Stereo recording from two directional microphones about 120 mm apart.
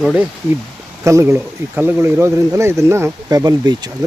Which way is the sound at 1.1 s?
25° right (ahead or behind).